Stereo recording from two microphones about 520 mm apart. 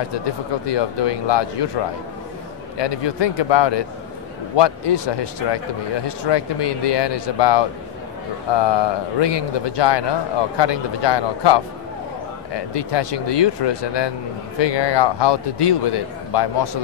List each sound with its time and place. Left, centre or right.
0.7 s a man's voice: left
2.8 s a man's voice: left